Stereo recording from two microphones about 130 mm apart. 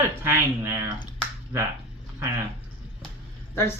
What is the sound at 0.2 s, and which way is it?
Speech, 20° right (ahead or behind).